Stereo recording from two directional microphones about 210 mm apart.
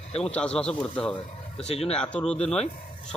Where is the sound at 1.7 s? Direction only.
30° left (ahead or behind).